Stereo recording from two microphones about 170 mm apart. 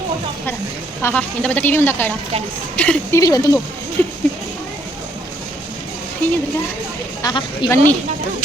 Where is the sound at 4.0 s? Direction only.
10° left (ahead or behind).